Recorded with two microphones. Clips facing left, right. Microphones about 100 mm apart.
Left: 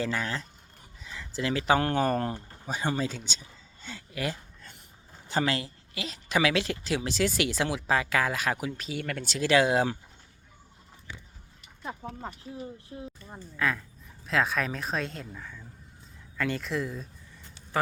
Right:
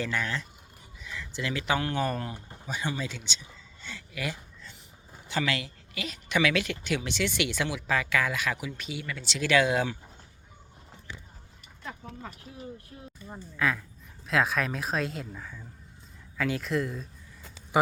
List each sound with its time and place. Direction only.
0.0 s speech: 35° left (ahead or behind)
9.0 s speech: 55° left (ahead or behind)
9.4 s speech: 30° left (ahead or behind)
11.8 s a sound: 25° left (ahead or behind)
12.9 s speech: 20° left (ahead or behind)
13.3 s speech: centre (ahead or behind)